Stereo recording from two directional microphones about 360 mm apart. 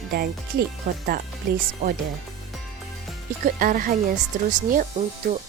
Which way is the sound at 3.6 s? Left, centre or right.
Right.